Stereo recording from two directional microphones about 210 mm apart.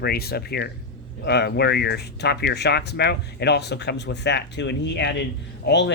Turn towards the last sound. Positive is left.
turn(degrees=55)  # may be behind; listen again after turning